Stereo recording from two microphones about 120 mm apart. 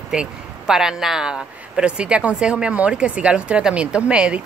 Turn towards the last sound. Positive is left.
turn(degrees=-10)  # may be behind; listen again after turning